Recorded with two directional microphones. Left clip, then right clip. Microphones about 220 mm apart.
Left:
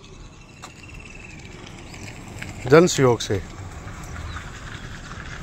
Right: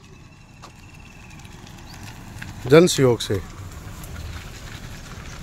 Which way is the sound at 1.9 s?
25° right (ahead or behind).